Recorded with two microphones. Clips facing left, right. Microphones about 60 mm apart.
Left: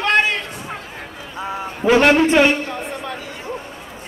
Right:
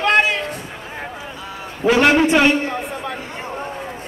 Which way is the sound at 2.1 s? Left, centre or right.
Centre.